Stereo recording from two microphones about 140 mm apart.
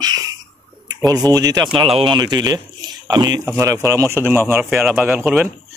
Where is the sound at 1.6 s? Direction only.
40° right (ahead or behind); by 4.2 s 20° right (ahead or behind).